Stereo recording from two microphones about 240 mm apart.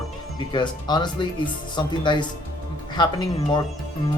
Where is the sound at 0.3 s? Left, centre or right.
Centre.